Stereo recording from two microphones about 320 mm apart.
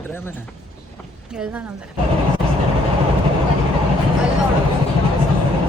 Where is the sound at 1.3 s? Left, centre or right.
Centre.